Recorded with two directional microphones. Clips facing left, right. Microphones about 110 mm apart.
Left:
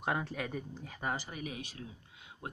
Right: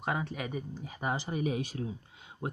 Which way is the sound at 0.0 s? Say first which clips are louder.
Right 1 dB; centre (ahead or behind).